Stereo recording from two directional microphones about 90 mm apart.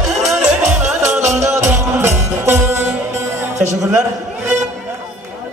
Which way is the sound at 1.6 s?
25° right (ahead or behind).